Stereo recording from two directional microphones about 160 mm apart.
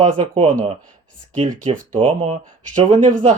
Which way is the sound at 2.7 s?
55° right (ahead or behind).